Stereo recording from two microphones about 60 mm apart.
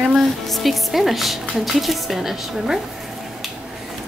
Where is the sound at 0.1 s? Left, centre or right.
Centre.